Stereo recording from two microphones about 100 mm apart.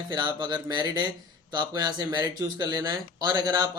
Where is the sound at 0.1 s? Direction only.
45° right (ahead or behind).